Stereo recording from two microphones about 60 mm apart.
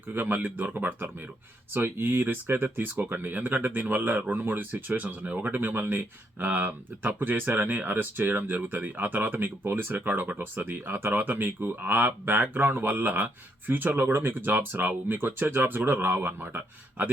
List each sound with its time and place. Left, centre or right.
0.1 s speech: right